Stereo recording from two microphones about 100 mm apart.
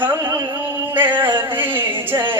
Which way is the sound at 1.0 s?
20° right (ahead or behind).